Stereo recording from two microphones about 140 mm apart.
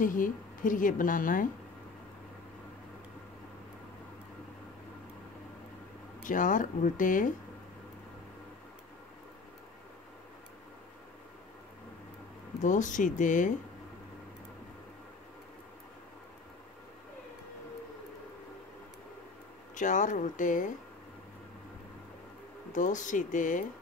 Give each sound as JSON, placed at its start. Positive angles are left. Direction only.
{"t": 0.0, "sound": "a woman's voice", "side_deg": 75}
{"t": 6.2, "sound": "a woman's voice", "side_deg": 70}
{"t": 12.5, "sound": "speech", "side_deg": 65}
{"t": 19.7, "sound": "speech", "side_deg": 65}
{"t": 22.7, "sound": "speech", "side_deg": 65}